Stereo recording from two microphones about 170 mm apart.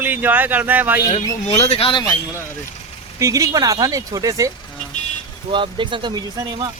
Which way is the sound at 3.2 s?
20° right (ahead or behind).